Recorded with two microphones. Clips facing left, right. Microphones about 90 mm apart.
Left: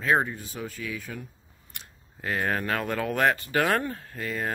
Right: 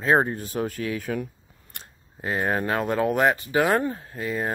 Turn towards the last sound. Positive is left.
turn(degrees=-15)  # may be behind; listen again after turning